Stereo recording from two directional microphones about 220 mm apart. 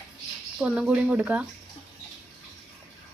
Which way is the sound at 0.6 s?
5° right (ahead or behind).